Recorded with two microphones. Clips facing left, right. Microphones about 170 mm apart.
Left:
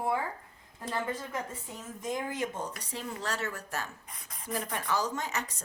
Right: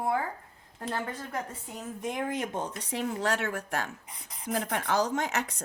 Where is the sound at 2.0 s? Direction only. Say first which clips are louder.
Right 1 dB; 65° right (ahead or behind).